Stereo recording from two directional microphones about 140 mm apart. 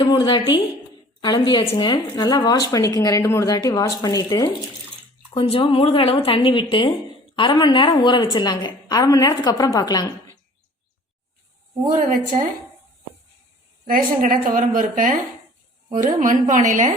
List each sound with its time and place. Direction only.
0.0 s a woman's voice: 35° left (ahead or behind)
5.3 s a woman's voice: 45° left (ahead or behind); by 10.1 s 30° left (ahead or behind)
13.8 s a woman's voice: 75° right (ahead or behind)
16.0 s a woman's voice: 65° right (ahead or behind)